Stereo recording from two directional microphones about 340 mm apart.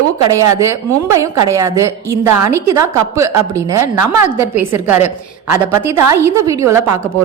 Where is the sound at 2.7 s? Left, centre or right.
Centre.